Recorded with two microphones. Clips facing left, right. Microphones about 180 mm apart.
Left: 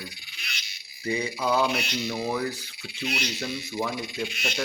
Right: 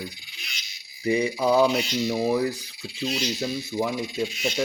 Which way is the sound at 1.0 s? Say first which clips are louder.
Right 5 dB; 20° right (ahead or behind).